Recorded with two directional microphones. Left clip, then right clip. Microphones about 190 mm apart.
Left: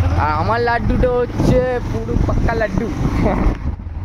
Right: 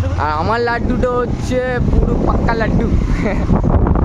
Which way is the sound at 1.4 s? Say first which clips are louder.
Left 2 dB; 15° right (ahead or behind).